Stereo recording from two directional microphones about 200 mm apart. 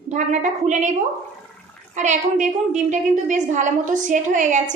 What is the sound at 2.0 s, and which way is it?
A woman's voice, 35° right (ahead or behind).